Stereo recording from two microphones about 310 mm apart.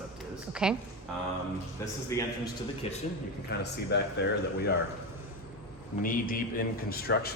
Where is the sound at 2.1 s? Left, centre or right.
Centre.